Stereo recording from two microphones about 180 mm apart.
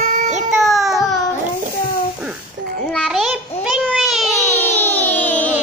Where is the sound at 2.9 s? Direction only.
Centre (ahead or behind).